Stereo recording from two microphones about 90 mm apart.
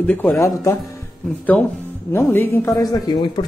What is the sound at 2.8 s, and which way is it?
Speech, 50° left (ahead or behind).